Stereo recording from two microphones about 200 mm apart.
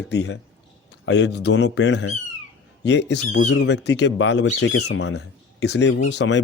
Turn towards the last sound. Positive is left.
turn(degrees=60)  # may be behind; listen again after turning